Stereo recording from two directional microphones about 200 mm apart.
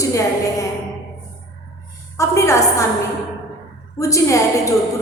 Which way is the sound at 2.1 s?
15° left (ahead or behind).